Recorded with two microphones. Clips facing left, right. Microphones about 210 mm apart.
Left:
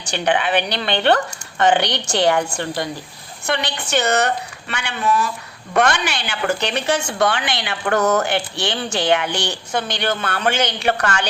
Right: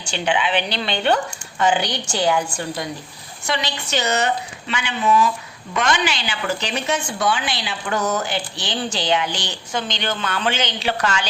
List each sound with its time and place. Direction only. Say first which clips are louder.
0.1 s a woman's voice: left 2 dB; 55° left (ahead or behind)